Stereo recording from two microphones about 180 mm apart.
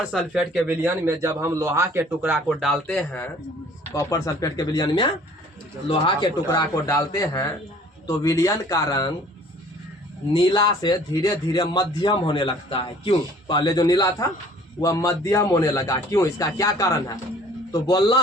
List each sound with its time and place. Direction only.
0.0 s a man's voice: 5° right (ahead or behind)
2.5 s speech: centre (ahead or behind)
3.9 s a man's voice: 20° left (ahead or behind)
10.3 s a man's voice: 25° left (ahead or behind)